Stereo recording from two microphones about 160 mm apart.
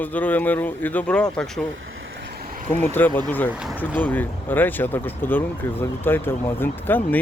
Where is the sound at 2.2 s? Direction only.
80° right.